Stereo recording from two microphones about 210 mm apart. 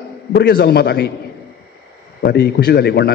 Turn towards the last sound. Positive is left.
turn(degrees=50)  # may be behind; listen again after turning